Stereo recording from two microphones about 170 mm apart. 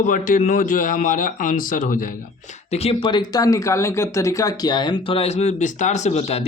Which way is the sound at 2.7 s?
35° left (ahead or behind).